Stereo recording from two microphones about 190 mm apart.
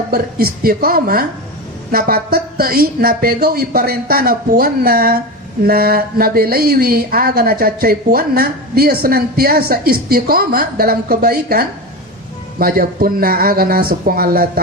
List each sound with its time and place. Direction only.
0.1 s a woman's voice: 50° right (ahead or behind)